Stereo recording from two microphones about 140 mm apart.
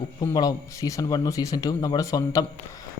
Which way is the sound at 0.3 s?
25° left (ahead or behind).